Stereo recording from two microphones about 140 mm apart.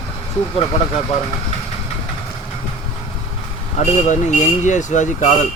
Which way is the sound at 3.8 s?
60° left (ahead or behind).